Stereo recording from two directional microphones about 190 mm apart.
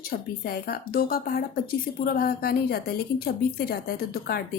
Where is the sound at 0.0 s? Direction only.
55° left (ahead or behind).